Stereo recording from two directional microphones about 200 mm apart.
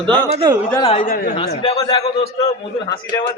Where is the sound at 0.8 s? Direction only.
30° left (ahead or behind).